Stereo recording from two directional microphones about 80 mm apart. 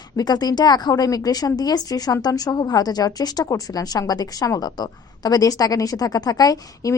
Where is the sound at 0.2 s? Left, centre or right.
Left.